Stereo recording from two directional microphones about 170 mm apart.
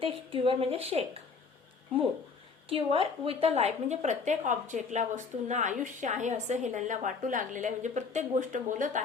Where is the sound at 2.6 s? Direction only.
35° right (ahead or behind).